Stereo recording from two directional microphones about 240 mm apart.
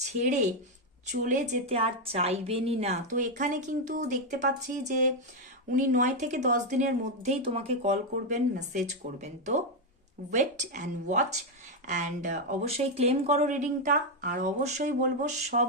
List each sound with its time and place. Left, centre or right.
0.2 s speech: right